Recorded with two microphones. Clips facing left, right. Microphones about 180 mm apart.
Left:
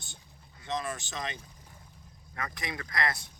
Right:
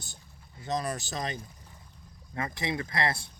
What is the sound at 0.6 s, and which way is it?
Speech, 40° right (ahead or behind).